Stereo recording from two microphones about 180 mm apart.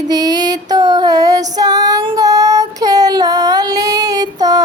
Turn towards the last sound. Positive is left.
turn(degrees=-20)  # may be behind; listen again after turning